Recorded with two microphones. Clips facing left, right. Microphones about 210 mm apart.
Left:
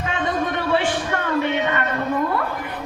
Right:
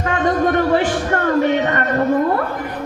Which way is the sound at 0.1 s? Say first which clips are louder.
Right 8 dB; 45° right (ahead or behind).